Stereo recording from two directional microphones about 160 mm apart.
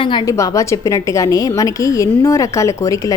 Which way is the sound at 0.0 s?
30° left (ahead or behind).